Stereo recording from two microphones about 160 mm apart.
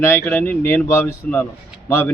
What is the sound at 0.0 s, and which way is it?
A man's voice, 15° left (ahead or behind).